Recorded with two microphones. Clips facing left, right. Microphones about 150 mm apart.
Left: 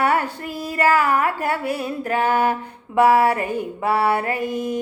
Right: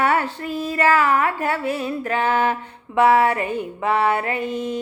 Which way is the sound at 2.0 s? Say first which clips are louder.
Left 1 dB; 40° left (ahead or behind).